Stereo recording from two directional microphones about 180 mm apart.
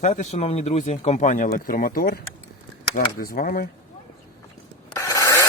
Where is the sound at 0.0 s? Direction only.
35° left (ahead or behind).